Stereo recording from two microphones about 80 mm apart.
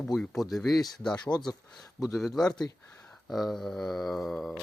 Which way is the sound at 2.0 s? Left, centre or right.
Centre.